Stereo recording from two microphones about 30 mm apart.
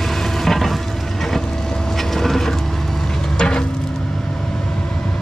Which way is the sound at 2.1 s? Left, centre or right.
Centre.